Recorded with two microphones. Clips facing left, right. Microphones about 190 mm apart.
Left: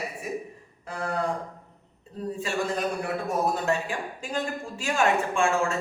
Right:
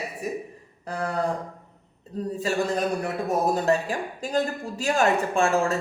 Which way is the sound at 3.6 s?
35° right (ahead or behind).